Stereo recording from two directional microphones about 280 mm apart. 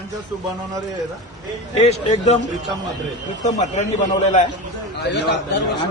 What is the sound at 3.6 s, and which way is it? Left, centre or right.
Speech, left.